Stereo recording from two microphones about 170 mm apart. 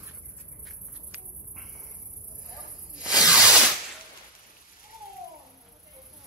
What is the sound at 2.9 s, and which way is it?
Snake, 5° right (ahead or behind).